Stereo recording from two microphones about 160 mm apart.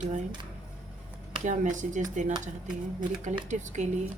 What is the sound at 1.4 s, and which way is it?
Speech, 50° right (ahead or behind).